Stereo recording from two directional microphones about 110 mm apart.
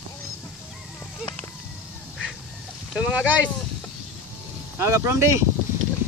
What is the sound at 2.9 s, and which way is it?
Speech, 10° right (ahead or behind).